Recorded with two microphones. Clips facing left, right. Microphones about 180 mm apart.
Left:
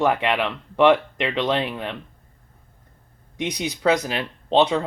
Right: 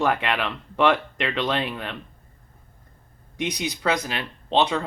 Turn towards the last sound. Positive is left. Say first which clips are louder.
# left 3 dB
turn(degrees=30)  # may be behind; listen again after turning